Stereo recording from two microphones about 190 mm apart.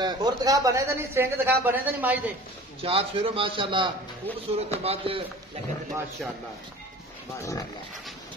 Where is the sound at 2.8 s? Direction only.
30° right (ahead or behind).